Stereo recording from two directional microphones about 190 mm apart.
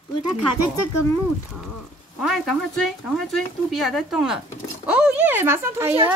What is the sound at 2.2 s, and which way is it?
Speech, centre (ahead or behind).